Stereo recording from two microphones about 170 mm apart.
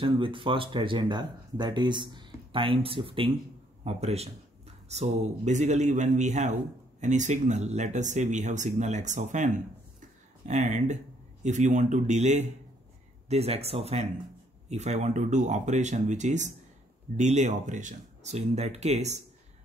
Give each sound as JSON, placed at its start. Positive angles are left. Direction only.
{"t": 0.0, "sound": "speech", "side_deg": -30}